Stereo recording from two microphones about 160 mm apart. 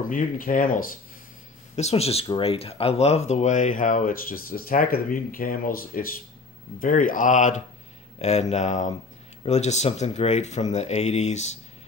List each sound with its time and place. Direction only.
0.1 s speech: 60° left (ahead or behind)
1.8 s speech: 40° left (ahead or behind)